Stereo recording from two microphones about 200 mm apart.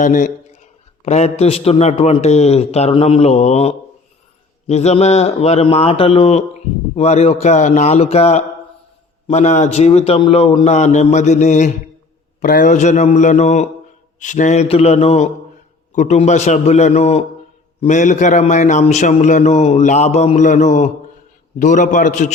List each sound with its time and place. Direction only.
0.0 s a man's voice: 40° left (ahead or behind)